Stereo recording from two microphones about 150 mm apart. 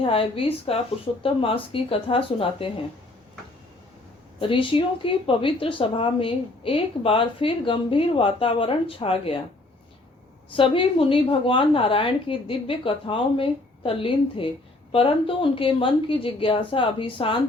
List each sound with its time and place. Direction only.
0.0 s speech: 40° left (ahead or behind)
4.4 s speech: 35° left (ahead or behind)
10.5 s speech: 35° left (ahead or behind)